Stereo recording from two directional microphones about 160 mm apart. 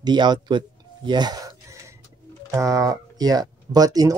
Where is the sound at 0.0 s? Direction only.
25° right (ahead or behind).